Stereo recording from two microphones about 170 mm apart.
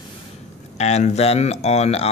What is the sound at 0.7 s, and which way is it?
Speech, 40° left (ahead or behind).